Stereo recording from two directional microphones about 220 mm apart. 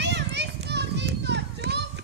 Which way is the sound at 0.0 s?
50° right (ahead or behind).